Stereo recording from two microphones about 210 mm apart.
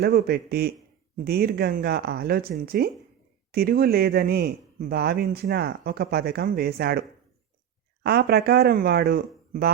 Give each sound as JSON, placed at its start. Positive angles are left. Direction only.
{"t": 0.0, "sound": "speech", "side_deg": -45}
{"t": 8.0, "sound": "speech", "side_deg": -50}